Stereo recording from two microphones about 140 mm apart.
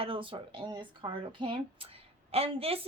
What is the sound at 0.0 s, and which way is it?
A woman's voice, 40° right (ahead or behind).